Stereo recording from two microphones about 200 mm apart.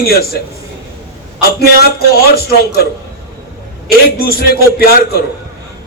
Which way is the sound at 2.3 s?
50° left (ahead or behind).